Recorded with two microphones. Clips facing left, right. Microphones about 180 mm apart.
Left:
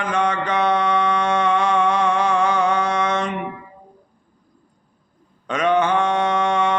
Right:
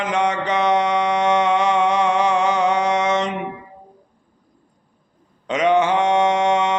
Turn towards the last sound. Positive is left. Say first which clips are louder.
# right 2 dB
turn(degrees=-20)  # may be behind; listen again after turning